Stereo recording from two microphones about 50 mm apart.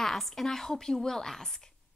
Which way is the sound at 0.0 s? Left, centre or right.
Centre.